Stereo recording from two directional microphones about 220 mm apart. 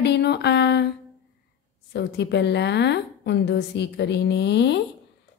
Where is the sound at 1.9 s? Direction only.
50° left (ahead or behind).